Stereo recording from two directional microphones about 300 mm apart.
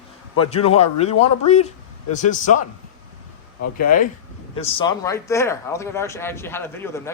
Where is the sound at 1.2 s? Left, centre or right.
Left.